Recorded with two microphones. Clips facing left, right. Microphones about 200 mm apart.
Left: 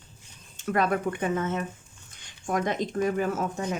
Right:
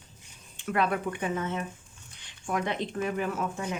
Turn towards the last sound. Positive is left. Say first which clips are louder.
# left 3 dB
turn(degrees=40)  # may be behind; listen again after turning